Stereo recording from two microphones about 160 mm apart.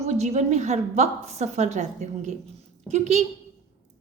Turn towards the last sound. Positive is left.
turn(degrees=-45)  # may be behind; listen again after turning